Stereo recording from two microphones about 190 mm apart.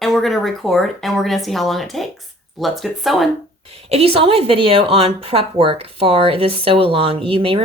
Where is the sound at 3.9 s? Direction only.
30° right (ahead or behind).